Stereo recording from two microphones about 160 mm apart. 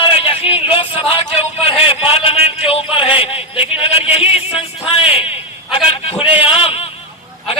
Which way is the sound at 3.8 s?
35° left (ahead or behind).